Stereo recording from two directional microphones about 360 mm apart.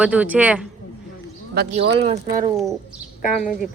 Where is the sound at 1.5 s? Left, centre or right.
Right.